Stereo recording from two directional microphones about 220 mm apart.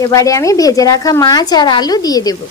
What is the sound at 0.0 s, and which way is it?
A woman's voice, 15° left (ahead or behind).